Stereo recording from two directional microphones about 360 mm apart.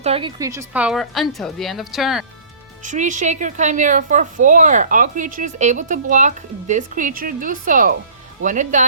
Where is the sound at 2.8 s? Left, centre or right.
Centre.